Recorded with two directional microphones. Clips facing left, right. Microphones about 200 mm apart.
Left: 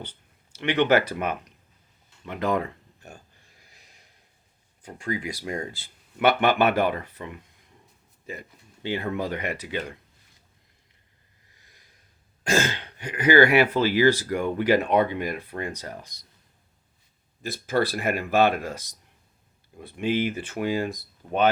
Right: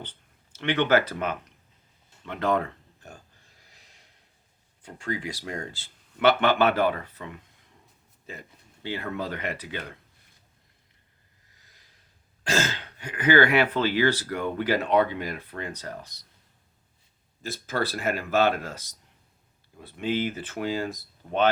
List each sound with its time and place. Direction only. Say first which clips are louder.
0.5 s speech: left 2 dB; 15° left (ahead or behind)
4.9 s speech: left 2 dB; 10° left (ahead or behind)
8.8 s speech: left 4 dB; 15° left (ahead or behind)
13.0 s speech: left 3 dB; 10° left (ahead or behind)
17.5 s speech: left 4 dB; 15° left (ahead or behind)